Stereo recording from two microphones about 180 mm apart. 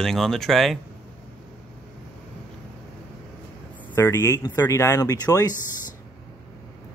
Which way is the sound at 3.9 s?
15° left (ahead or behind).